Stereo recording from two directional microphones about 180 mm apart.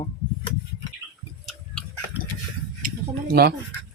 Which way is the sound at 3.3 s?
60° right (ahead or behind).